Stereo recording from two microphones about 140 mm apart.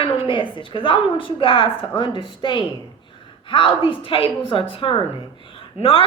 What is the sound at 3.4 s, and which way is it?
A woman's voice, 40° left (ahead or behind).